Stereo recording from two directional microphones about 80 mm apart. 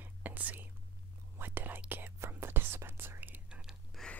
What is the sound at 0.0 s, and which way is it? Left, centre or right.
Whispering, right.